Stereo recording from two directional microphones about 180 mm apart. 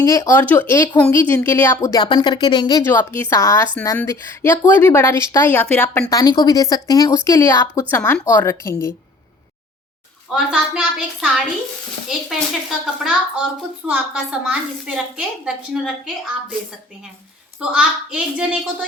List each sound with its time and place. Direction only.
0.0 s a woman's voice: 15° left (ahead or behind)
2.8 s speech: 10° left (ahead or behind)
10.2 s a woman's voice: 5° right (ahead or behind)
12.8 s a woman's voice: centre (ahead or behind)
17.6 s a woman's voice: 5° right (ahead or behind)